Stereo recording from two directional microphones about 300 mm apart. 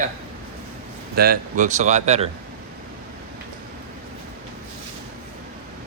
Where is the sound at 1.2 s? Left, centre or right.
Right.